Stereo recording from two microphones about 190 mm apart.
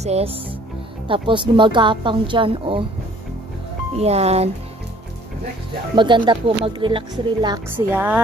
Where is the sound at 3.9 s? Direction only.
35° right (ahead or behind).